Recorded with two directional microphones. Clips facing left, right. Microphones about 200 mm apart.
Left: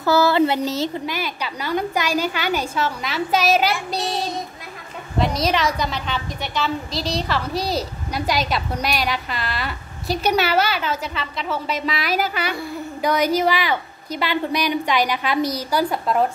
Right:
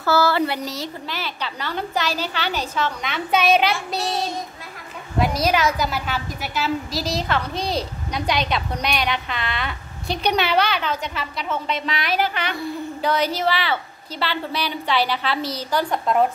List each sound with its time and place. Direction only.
0.0 s speech: 15° left (ahead or behind)
1.0 s a woman's voice: 10° left (ahead or behind)